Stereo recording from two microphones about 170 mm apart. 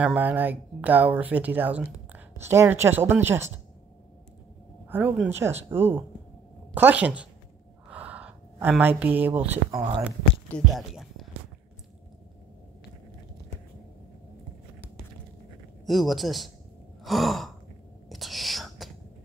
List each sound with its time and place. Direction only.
0.0 s speech: 10° right (ahead or behind)
4.8 s speech: 10° right (ahead or behind)
7.9 s a sound: 10° right (ahead or behind)
9.7 s speech: 30° right (ahead or behind)
10.5 s a sound: centre (ahead or behind)
15.8 s speech: centre (ahead or behind)
17.0 s sigh: centre (ahead or behind)
18.0 s whispering: centre (ahead or behind)